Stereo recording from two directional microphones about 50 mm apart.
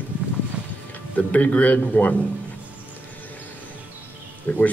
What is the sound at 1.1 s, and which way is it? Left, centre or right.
Speech, left.